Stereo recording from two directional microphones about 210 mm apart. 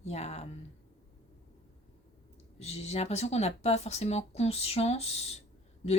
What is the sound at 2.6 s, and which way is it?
Speech, 30° left (ahead or behind).